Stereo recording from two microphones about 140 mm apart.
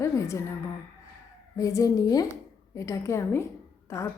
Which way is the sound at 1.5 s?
25° left (ahead or behind).